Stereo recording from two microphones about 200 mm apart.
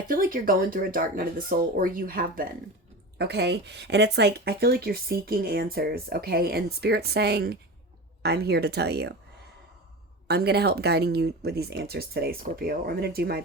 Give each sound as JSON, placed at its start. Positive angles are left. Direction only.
{"t": 0.1, "sound": "speech", "side_deg": -45}
{"t": 10.2, "sound": "speech", "side_deg": -55}